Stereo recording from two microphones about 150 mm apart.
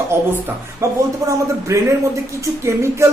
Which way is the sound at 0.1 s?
15° right (ahead or behind).